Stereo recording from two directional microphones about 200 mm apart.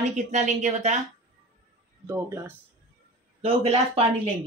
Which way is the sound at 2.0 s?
15° right (ahead or behind).